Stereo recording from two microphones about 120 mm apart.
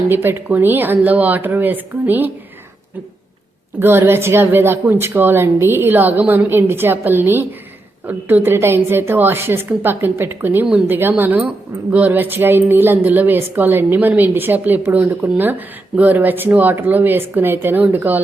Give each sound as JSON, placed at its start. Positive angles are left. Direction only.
{"t": 0.1, "sound": "a woman's voice", "side_deg": -15}
{"t": 3.8, "sound": "a woman's voice", "side_deg": -20}